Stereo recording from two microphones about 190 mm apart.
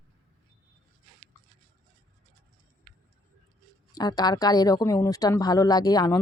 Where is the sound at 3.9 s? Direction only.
20° left (ahead or behind).